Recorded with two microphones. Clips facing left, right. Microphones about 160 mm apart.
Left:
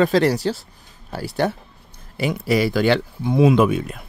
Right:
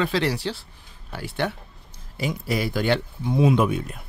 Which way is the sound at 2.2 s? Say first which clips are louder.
Left 6 dB; 70° left (ahead or behind).